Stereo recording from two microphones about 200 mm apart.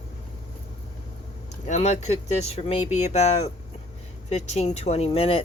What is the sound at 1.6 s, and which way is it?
Speech, 35° left (ahead or behind).